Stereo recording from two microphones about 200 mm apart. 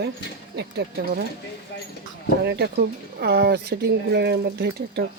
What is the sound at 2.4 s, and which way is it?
Speech, 55° right (ahead or behind).